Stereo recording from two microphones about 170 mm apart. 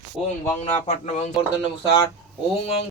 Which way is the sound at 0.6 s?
40° left (ahead or behind).